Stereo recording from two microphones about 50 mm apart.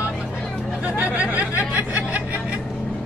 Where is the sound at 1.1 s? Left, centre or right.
Right.